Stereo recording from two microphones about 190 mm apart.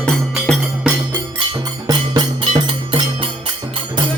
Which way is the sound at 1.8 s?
20° right (ahead or behind).